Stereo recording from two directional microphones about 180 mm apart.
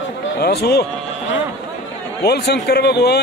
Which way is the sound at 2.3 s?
65° left (ahead or behind).